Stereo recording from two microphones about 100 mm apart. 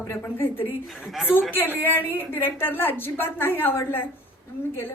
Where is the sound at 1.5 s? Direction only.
20° left (ahead or behind).